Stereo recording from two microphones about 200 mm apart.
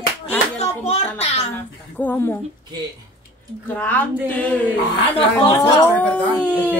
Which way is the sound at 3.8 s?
10° left (ahead or behind).